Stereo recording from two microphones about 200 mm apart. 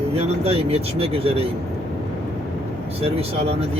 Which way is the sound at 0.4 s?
30° right (ahead or behind).